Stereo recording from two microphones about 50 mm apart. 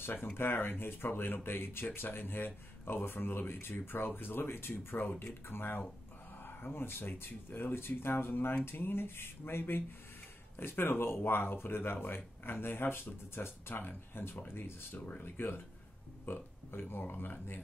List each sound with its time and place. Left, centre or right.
0.0 s speech: left